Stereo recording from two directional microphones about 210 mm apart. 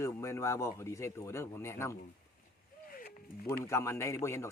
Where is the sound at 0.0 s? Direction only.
15° left (ahead or behind).